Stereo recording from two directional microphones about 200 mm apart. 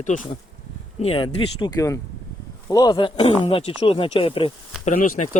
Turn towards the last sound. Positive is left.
turn(degrees=35)  # may be behind; listen again after turning